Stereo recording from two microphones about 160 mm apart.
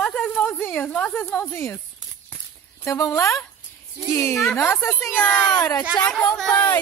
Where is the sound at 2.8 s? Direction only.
20° left (ahead or behind).